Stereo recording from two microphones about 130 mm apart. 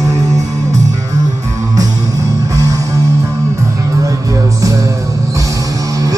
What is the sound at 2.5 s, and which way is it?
Music, 25° right (ahead or behind).